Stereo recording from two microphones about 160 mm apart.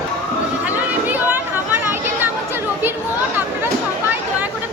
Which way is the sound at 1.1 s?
10° right (ahead or behind).